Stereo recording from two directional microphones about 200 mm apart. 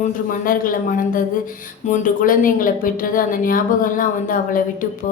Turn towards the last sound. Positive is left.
turn(degrees=45)  # may be behind; listen again after turning